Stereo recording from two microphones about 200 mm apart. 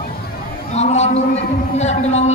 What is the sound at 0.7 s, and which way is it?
Speech, 35° left (ahead or behind).